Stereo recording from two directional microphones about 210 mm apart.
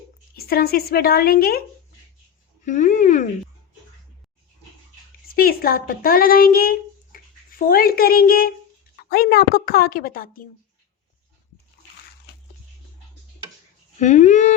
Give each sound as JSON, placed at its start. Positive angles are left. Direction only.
{"t": 0.3, "sound": "a woman's voice", "side_deg": 45}
{"t": 2.6, "sound": "speech", "side_deg": 35}
{"t": 5.3, "sound": "a woman's voice", "side_deg": 45}
{"t": 14.0, "sound": "speech", "side_deg": 35}